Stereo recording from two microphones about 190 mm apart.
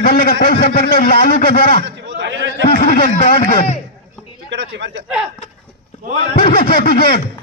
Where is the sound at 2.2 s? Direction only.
70° right (ahead or behind).